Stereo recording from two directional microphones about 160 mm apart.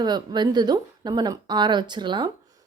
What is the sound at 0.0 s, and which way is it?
Speech, 25° right (ahead or behind).